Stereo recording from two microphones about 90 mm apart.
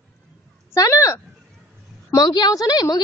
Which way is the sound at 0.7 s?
35° left (ahead or behind).